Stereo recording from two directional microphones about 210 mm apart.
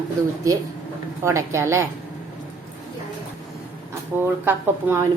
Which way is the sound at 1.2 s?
15° right (ahead or behind).